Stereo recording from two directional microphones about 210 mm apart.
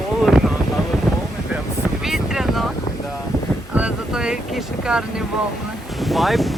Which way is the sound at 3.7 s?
5° right (ahead or behind).